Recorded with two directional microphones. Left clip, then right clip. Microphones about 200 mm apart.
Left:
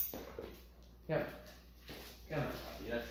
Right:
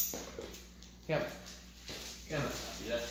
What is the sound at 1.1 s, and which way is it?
Speech, 20° right (ahead or behind).